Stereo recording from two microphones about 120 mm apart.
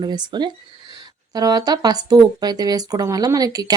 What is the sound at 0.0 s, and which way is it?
Speech, 40° right (ahead or behind).